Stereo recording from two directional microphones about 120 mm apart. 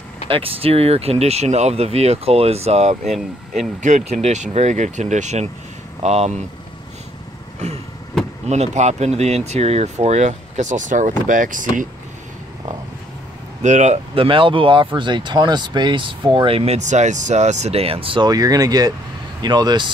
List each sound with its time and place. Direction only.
0.3 s speech: 50° right (ahead or behind)
7.6 s vehicle: 70° right (ahead or behind)
8.5 s speech: 70° right (ahead or behind); by 11.6 s 90° right
13.6 s speech: 75° right (ahead or behind)
14.1 s speech: 45° right (ahead or behind)
18.3 s speech: 30° right (ahead or behind)